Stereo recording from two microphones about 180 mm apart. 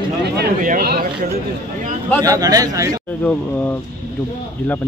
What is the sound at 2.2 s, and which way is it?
Speech, 20° right (ahead or behind).